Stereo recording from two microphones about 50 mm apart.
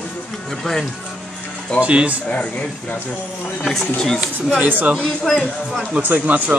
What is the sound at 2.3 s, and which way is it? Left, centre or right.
Speech, left.